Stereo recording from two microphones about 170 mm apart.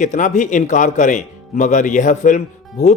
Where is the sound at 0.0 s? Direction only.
45° left (ahead or behind).